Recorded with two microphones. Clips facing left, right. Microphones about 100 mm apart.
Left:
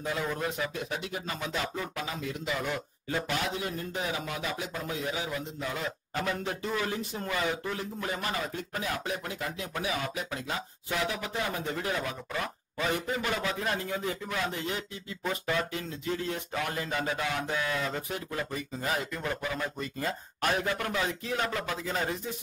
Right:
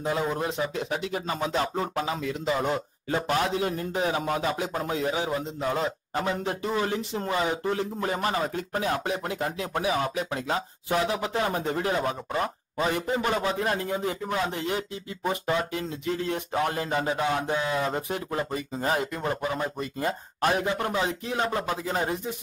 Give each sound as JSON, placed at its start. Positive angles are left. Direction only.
{"t": 0.0, "sound": "a man's voice", "side_deg": -25}
{"t": 14.5, "sound": "speech", "side_deg": -70}
{"t": 14.8, "sound": "a man's voice", "side_deg": -30}
{"t": 16.6, "sound": "a man's voice", "side_deg": -30}